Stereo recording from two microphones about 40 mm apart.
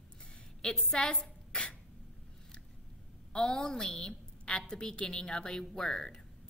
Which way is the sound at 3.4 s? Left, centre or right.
Centre.